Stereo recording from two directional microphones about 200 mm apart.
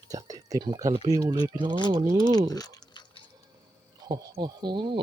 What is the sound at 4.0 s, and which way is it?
Speech, 20° right (ahead or behind).